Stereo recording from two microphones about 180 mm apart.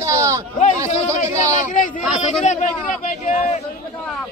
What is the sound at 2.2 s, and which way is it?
A man's voice, 40° left (ahead or behind).